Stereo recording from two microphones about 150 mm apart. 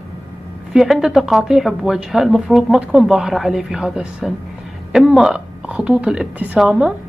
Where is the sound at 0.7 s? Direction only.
5° right (ahead or behind).